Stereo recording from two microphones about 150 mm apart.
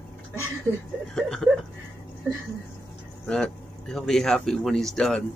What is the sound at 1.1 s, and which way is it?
Speech, 5° left (ahead or behind).